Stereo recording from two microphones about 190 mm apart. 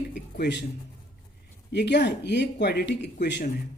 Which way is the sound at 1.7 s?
65° left (ahead or behind).